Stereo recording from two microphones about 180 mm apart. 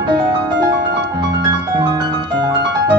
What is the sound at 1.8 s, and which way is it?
Music, 25° right (ahead or behind).